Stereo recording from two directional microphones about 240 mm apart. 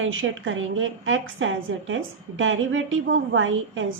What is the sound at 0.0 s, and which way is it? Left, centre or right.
A woman's voice, right.